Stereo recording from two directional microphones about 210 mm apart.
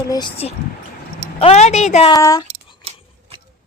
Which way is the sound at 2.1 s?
15° left (ahead or behind).